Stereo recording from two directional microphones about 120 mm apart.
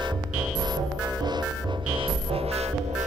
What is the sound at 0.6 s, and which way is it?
Music, 35° right (ahead or behind).